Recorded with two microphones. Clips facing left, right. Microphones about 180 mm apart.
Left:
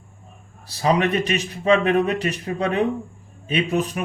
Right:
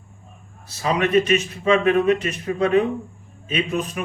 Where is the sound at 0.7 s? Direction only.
35° left (ahead or behind).